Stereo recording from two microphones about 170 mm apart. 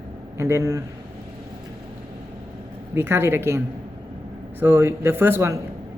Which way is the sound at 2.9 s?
15° right (ahead or behind).